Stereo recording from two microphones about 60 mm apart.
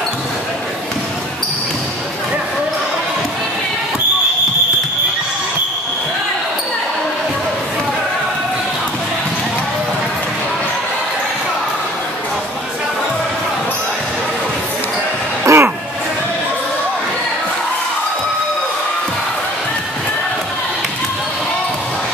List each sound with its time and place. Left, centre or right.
15.4 s music: right